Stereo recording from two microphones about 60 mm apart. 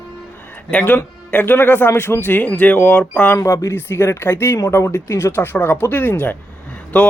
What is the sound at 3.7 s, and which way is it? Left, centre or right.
Speech, left.